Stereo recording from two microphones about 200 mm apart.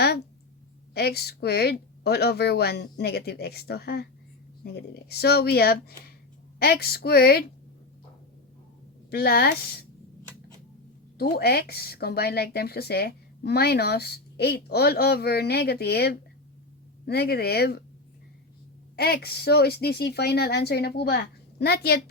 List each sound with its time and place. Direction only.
0.9 s speech: 55° left (ahead or behind)
9.0 s speech: 50° left (ahead or behind)
11.2 s speech: 50° left (ahead or behind)
18.9 s speech: 50° left (ahead or behind)